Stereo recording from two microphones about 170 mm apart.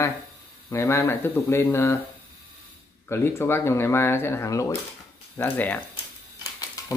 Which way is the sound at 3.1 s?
15° left (ahead or behind).